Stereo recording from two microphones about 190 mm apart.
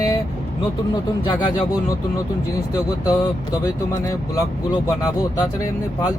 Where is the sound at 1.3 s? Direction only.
25° left (ahead or behind).